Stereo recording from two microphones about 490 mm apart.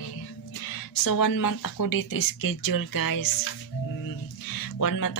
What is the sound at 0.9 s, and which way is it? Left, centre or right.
Speech, left.